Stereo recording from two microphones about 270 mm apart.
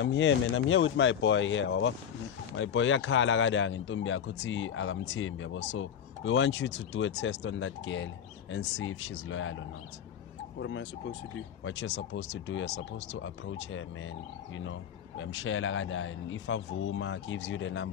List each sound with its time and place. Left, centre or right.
0.0 s speech: left
10.6 s speech: left